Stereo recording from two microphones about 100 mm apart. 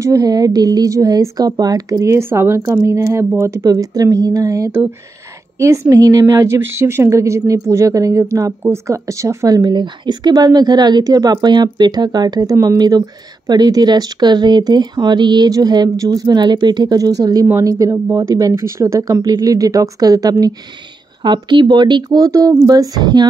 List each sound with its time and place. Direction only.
0.0 s a woman's voice: 35° right (ahead or behind)
9.6 s a woman's voice: 45° right (ahead or behind)
21.2 s speech: 50° right (ahead or behind)
22.1 s a woman's voice: 35° right (ahead or behind)